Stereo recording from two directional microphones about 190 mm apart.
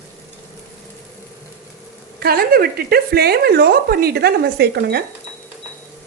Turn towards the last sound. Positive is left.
turn(degrees=-60)  # may be behind; listen again after turning